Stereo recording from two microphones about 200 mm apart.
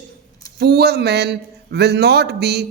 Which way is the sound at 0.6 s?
55° right (ahead or behind).